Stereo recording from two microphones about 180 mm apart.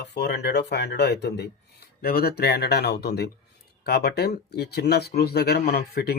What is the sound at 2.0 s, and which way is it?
Speech, 55° left (ahead or behind).